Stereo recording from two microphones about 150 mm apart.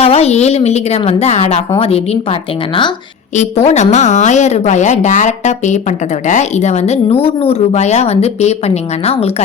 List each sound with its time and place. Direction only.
0.0 s a woman's voice: 45° left (ahead or behind)
3.3 s speech: 45° left (ahead or behind)